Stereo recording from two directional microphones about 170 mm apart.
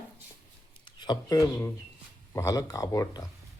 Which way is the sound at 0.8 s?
25° left (ahead or behind).